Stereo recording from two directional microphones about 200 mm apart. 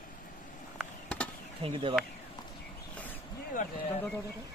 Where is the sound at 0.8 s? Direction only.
5° left (ahead or behind).